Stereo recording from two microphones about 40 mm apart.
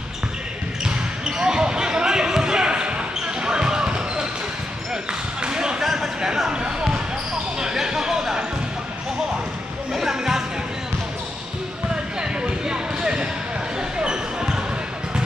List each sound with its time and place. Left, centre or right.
0.8 s basketball bounce: centre
5.4 s basketball bounce: right
5.9 s a sound: centre
6.5 s basketball bounce: centre
7.6 s a sound: centre
9.9 s music: centre
11.9 s basketball bounce: right